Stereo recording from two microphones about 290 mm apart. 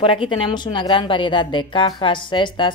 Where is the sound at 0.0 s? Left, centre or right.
Centre.